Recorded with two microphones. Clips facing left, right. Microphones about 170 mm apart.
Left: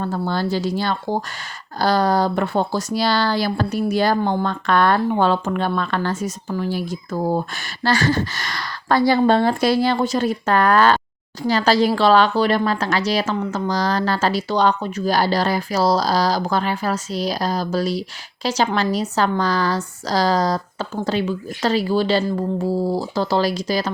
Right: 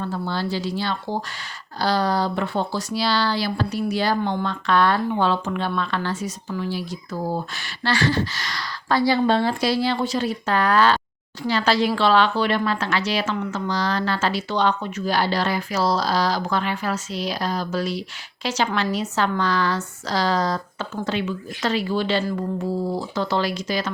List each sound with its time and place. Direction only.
0.0 s a woman's voice: 45° left (ahead or behind)